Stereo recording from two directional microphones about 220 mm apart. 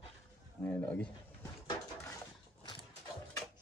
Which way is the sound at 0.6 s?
5° left (ahead or behind).